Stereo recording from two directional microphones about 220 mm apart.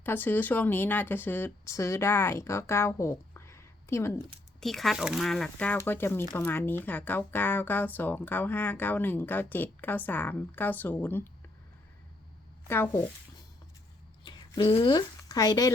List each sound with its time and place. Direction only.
0.0 s speech: 10° left (ahead or behind)
4.6 s speech: centre (ahead or behind)
12.6 s speech: 10° left (ahead or behind)
14.3 s speech: 20° left (ahead or behind)